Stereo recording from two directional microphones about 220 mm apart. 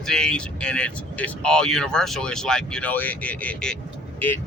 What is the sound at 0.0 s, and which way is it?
Speech, 5° left (ahead or behind).